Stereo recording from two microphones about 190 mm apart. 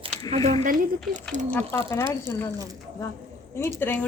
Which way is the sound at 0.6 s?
40° right (ahead or behind).